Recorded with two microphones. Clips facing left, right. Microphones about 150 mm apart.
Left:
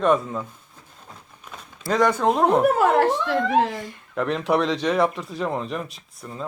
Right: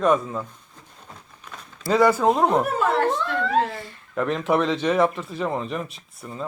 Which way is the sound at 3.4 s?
15° left (ahead or behind).